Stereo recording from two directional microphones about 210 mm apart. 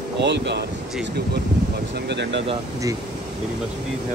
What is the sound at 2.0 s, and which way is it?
Speech, 55° right (ahead or behind).